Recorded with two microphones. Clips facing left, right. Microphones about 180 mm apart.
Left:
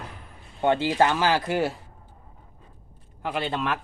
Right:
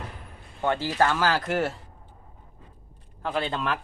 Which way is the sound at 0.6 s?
20° left (ahead or behind).